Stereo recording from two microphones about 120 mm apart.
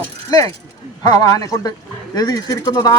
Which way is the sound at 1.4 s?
30° left (ahead or behind).